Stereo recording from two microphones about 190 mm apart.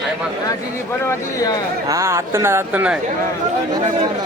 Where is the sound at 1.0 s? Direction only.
15° left (ahead or behind).